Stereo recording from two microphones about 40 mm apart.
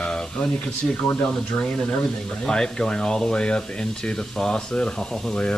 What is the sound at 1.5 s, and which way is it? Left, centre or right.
Speech, left.